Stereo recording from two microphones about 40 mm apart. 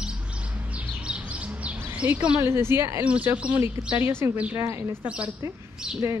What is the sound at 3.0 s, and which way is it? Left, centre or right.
Speech, right.